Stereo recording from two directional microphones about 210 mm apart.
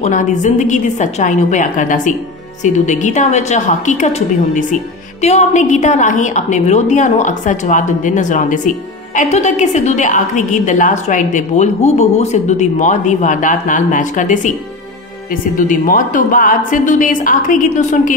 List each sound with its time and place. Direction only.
0.0 s a woman's voice: 35° left (ahead or behind)
5.2 s a woman's voice: 35° left (ahead or behind)
15.5 s a woman's voice: 40° left (ahead or behind)